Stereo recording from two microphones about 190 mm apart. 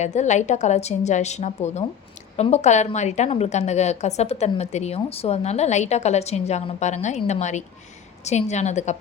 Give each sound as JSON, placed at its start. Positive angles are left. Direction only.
{"t": 0.0, "sound": "a woman's voice", "side_deg": 40}